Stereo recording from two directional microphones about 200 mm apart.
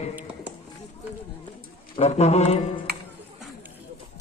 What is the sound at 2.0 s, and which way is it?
Speech, 35° left (ahead or behind).